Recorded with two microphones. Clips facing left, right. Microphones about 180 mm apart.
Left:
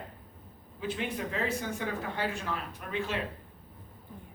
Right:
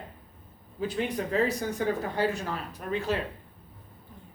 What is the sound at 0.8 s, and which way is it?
Speech, 40° right (ahead or behind).